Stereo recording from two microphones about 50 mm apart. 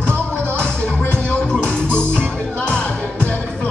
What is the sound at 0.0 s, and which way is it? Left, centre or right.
Music, left.